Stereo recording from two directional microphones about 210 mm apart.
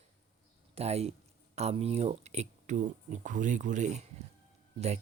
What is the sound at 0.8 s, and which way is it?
Speech, 30° right (ahead or behind).